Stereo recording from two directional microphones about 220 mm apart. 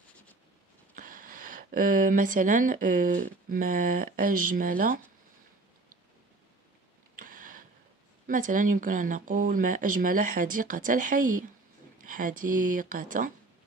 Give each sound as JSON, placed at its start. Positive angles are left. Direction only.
{"t": 0.9, "sound": "speech", "side_deg": -40}
{"t": 7.2, "sound": "a sound", "side_deg": -40}
{"t": 8.3, "sound": "speech", "side_deg": -35}